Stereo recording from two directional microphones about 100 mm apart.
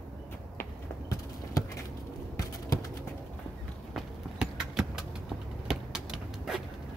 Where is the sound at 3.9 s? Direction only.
5° right (ahead or behind).